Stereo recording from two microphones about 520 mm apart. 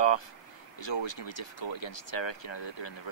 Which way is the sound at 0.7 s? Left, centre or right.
Left.